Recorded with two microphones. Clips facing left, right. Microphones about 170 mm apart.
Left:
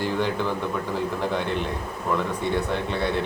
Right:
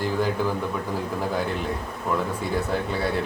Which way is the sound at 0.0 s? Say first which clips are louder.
Right 1 dB; 5° right (ahead or behind).